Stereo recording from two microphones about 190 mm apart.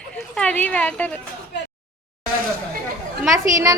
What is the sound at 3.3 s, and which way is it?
Speech, 15° right (ahead or behind).